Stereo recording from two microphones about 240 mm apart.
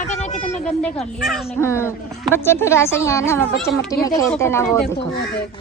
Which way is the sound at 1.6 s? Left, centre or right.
Centre.